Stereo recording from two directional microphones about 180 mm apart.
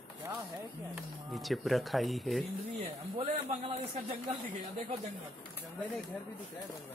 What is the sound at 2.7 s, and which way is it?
A man's voice, 35° right (ahead or behind).